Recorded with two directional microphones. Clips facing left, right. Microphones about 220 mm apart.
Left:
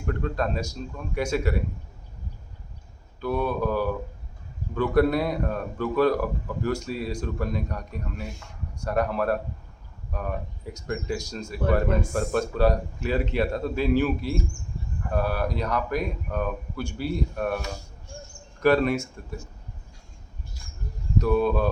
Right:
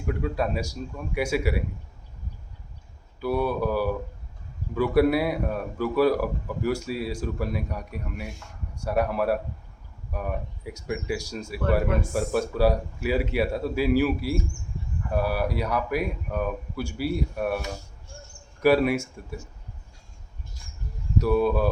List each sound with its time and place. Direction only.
0.0 s speech: 10° right (ahead or behind)
3.2 s speech: 10° right (ahead or behind)
18.6 s speech: 10° right (ahead or behind)
21.2 s speech: 10° right (ahead or behind)